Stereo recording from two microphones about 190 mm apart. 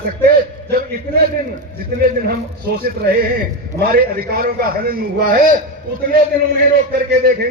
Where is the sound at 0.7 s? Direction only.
55° right (ahead or behind).